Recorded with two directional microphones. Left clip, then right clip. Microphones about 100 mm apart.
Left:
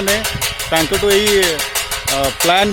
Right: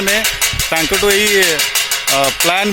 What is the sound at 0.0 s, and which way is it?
Speech, 50° left (ahead or behind).